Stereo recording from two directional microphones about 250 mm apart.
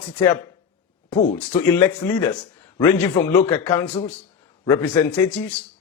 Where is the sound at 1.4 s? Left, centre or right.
Centre.